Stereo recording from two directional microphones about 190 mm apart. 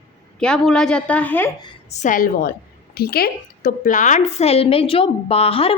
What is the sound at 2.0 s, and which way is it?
A woman's voice, 45° left (ahead or behind).